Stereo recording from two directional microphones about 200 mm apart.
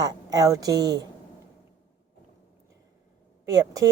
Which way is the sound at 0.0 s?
20° right (ahead or behind).